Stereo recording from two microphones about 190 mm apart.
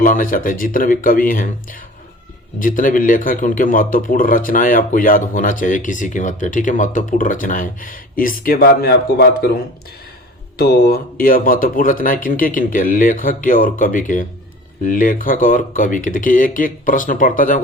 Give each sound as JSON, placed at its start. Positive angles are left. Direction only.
{"t": 0.0, "sound": "a man's voice", "side_deg": 45}
{"t": 2.6, "sound": "a man's voice", "side_deg": 45}
{"t": 10.6, "sound": "a man's voice", "side_deg": 55}